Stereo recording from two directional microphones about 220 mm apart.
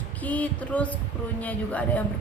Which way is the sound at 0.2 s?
5° left (ahead or behind).